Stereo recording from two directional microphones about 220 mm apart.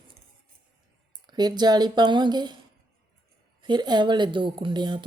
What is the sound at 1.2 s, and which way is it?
A woman's voice, 20° right (ahead or behind).